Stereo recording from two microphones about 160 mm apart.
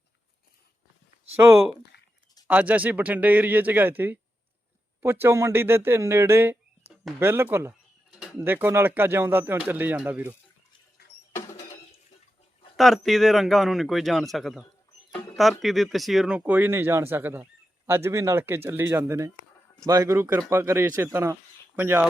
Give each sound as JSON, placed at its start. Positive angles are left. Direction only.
{"t": 1.4, "sound": "speech", "side_deg": -15}
{"t": 11.3, "sound": "rodents", "side_deg": 15}
{"t": 12.7, "sound": "speech", "side_deg": 0}